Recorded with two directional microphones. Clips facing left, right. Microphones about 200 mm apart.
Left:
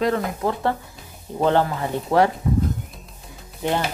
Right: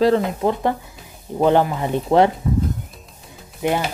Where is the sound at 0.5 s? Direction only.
15° right (ahead or behind).